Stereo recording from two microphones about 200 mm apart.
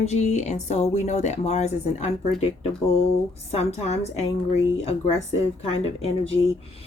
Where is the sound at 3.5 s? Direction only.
30° left (ahead or behind).